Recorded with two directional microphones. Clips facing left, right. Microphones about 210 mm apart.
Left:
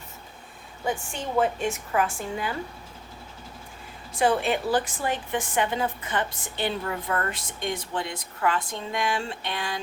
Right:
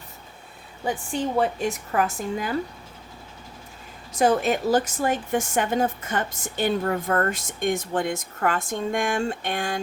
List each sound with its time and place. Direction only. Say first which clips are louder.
1.6 s a woman's voice: right 1 dB; 40° right (ahead or behind)
4.1 s a woman's voice: right 3 dB; 40° right (ahead or behind)